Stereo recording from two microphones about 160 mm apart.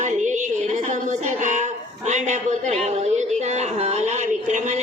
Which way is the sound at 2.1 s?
50° right (ahead or behind).